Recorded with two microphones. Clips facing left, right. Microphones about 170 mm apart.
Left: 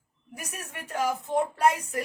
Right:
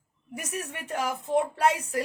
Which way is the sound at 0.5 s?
30° right (ahead or behind).